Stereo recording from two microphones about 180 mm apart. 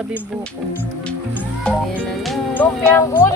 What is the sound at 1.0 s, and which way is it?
Music, 5° left (ahead or behind).